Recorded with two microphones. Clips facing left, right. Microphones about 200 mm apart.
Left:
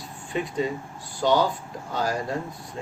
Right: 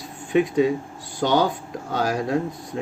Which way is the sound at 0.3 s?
90° right.